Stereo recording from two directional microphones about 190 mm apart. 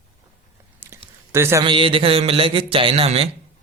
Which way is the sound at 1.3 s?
15° right (ahead or behind).